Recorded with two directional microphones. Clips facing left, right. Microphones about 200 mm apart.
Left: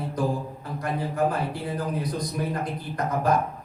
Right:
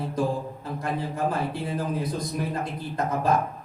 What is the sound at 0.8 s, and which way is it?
A man's voice, 25° right (ahead or behind).